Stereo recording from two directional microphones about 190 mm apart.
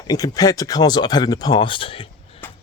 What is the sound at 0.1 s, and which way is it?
Speech, 20° left (ahead or behind).